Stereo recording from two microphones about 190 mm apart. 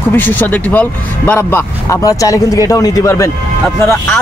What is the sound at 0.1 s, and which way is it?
Speech, 10° left (ahead or behind).